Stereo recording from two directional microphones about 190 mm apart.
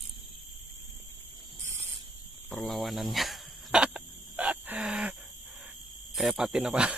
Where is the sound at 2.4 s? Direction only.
Centre (ahead or behind).